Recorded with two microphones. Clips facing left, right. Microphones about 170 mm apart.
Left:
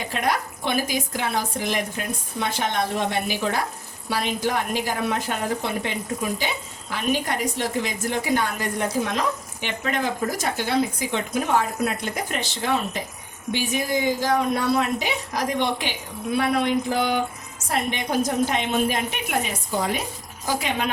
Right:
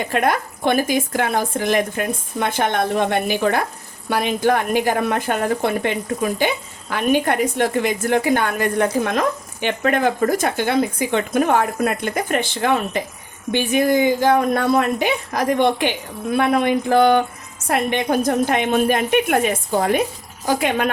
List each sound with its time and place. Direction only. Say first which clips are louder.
0.1 s a woman's voice: right 4 dB; 55° right (ahead or behind)